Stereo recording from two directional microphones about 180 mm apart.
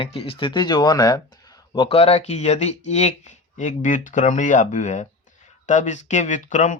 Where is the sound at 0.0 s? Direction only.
30° left (ahead or behind).